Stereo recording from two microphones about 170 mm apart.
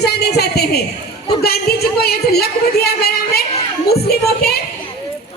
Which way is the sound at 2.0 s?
65° left (ahead or behind).